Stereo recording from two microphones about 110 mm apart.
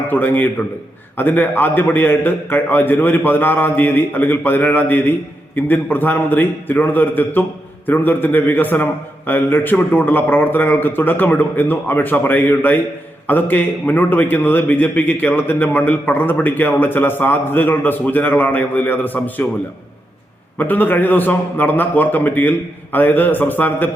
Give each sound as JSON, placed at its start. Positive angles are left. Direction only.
{"t": 0.1, "sound": "a man's voice", "side_deg": 15}
{"t": 20.6, "sound": "a man's voice", "side_deg": 15}